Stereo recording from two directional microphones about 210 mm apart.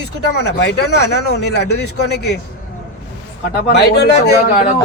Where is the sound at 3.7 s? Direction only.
50° left (ahead or behind).